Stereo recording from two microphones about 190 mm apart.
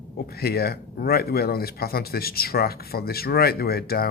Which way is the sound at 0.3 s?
55° left (ahead or behind).